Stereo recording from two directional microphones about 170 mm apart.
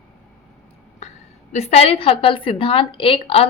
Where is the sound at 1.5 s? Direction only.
40° left (ahead or behind).